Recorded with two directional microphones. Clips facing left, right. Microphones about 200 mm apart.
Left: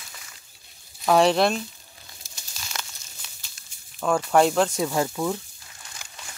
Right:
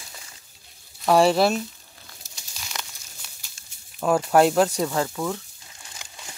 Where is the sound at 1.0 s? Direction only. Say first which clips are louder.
Right 1 dB; 5° right (ahead or behind).